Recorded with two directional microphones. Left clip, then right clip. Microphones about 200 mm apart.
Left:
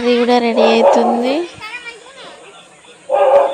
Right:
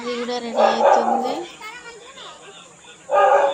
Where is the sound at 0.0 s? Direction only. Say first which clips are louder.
Left 13 dB; 40° left (ahead or behind).